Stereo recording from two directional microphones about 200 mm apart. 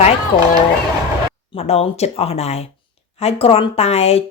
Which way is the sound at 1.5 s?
30° left (ahead or behind).